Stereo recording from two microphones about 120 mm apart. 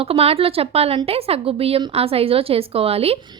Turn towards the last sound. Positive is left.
turn(degrees=-55)  # may be behind; listen again after turning